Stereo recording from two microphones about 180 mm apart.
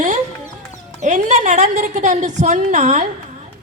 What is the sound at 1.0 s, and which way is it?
A woman's voice, 40° right (ahead or behind).